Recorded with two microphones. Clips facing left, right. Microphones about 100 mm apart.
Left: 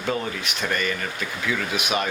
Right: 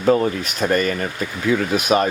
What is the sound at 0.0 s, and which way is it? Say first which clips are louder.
Speech: right 10 dB; 40° right (ahead or behind).